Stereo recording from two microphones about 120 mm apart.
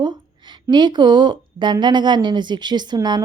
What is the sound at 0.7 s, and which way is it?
A woman's voice, 40° right (ahead or behind).